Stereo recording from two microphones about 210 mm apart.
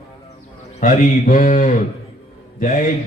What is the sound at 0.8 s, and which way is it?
Speech, 40° left (ahead or behind).